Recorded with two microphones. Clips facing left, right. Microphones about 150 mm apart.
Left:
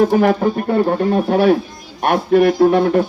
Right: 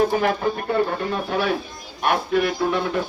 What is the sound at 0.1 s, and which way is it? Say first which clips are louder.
Speech: left 7 dB; 45° left (ahead or behind).